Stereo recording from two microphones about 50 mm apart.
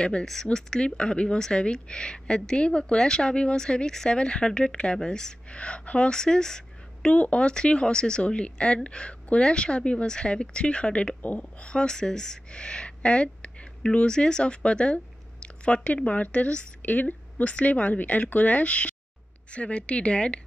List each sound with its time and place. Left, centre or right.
0.0 s speech: centre
7.1 s speech: left